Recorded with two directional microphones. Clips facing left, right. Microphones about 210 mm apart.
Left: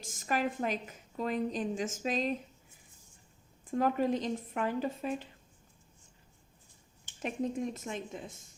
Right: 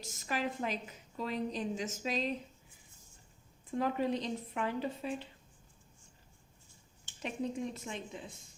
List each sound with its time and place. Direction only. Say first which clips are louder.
0.0 s a woman's voice: left 4 dB; 50° left (ahead or behind)
3.7 s a woman's voice: left 3 dB; 45° left (ahead or behind)
7.2 s a woman's voice: left 3 dB; 45° left (ahead or behind)